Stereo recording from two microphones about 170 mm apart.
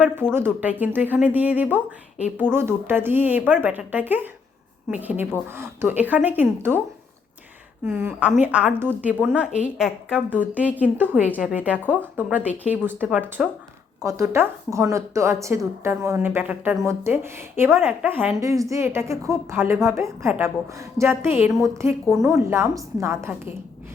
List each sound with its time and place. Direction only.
0.3 s a woman's voice: 10° right (ahead or behind)
7.9 s a woman's voice: 10° right (ahead or behind)